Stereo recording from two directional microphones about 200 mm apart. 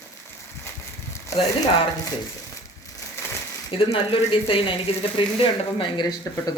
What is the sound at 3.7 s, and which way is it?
Speech, 25° left (ahead or behind).